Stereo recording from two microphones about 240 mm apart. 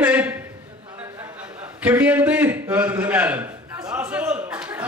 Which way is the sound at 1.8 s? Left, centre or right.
Centre.